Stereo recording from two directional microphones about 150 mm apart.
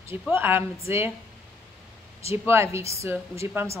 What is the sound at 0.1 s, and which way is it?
Speech, 15° right (ahead or behind).